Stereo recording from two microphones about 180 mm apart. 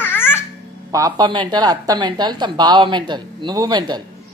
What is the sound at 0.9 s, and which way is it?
Speech, 20° right (ahead or behind).